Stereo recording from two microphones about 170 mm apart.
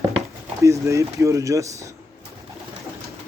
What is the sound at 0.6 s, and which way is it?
Speech, 15° right (ahead or behind).